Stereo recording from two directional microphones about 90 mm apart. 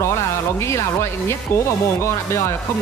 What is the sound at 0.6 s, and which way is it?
Speech, 30° left (ahead or behind).